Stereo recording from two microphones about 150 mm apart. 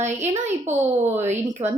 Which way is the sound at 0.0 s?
50° right (ahead or behind).